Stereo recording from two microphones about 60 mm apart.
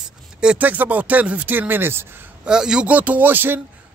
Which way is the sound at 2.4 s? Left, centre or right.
Centre.